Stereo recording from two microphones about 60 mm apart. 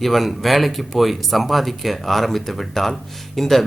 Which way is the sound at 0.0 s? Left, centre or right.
Centre.